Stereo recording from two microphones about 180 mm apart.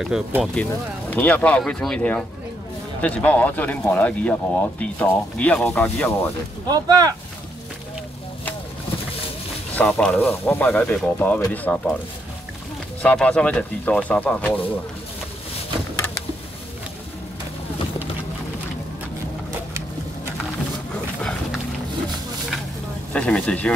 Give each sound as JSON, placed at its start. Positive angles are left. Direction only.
{"t": 0.0, "sound": "speech", "side_deg": 0}
{"t": 1.1, "sound": "speech", "side_deg": 10}
{"t": 6.7, "sound": "speech", "side_deg": -20}
{"t": 9.8, "sound": "speech", "side_deg": 5}
{"t": 13.0, "sound": "speech", "side_deg": 5}
{"t": 21.2, "sound": "dog", "side_deg": 0}
{"t": 23.1, "sound": "speech", "side_deg": 5}